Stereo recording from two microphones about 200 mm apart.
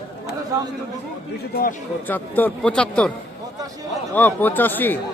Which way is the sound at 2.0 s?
10° left (ahead or behind).